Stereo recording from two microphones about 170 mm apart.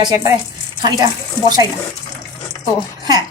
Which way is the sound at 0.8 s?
25° right (ahead or behind).